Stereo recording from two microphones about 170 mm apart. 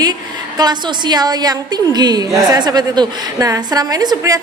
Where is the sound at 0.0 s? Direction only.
25° right (ahead or behind).